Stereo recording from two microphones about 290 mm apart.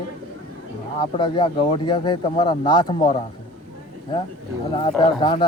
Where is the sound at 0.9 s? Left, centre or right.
Centre.